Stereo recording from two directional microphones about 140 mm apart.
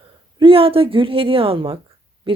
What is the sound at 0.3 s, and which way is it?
Speech, 40° right (ahead or behind).